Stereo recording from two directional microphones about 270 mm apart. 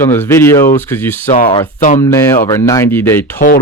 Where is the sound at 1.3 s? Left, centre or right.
Left.